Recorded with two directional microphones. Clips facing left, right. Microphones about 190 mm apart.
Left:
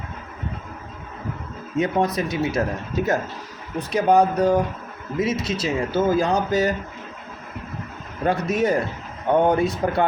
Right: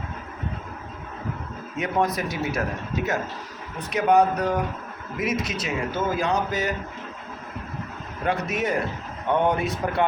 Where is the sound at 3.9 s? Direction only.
30° left (ahead or behind).